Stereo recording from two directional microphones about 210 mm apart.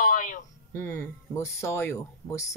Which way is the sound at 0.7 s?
15° left (ahead or behind).